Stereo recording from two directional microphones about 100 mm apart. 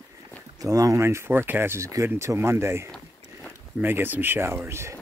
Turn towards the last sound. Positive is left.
turn(degrees=-25)  # may be behind; listen again after turning